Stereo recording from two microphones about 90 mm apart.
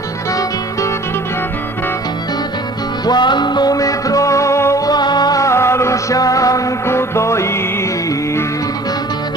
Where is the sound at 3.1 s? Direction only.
55° left (ahead or behind); by 4.8 s 35° left (ahead or behind).